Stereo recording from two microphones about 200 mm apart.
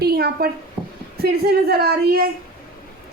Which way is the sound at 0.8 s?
Centre (ahead or behind).